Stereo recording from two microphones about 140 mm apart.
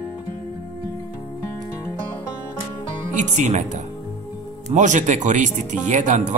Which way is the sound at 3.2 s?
60° right (ahead or behind).